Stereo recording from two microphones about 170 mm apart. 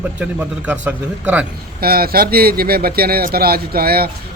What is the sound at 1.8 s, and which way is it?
Speech, 65° right (ahead or behind).